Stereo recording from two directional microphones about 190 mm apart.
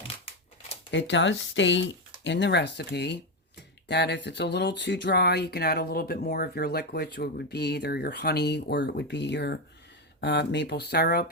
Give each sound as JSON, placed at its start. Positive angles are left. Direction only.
{"t": 0.9, "sound": "speech", "side_deg": 75}